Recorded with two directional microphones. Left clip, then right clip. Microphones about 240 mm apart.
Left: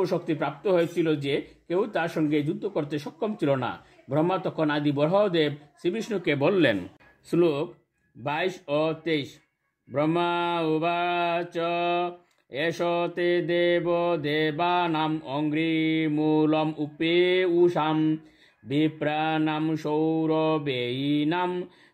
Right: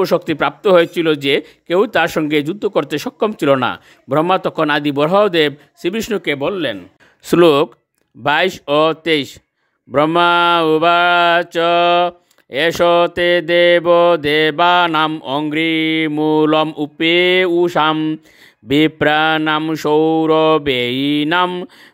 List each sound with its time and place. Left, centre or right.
0.0 s mantra: right
6.2 s speech: centre
6.5 s speech: centre
7.2 s mantra: right